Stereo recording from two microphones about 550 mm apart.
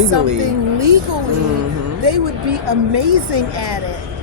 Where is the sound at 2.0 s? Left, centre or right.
Right.